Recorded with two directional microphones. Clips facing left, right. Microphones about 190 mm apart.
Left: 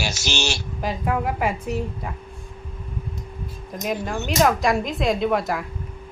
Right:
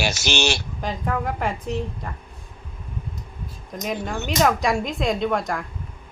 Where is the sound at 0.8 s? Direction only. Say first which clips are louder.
Left 4 dB; 5° left (ahead or behind).